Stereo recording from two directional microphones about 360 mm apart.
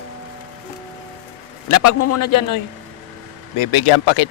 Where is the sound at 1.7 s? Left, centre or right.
Left.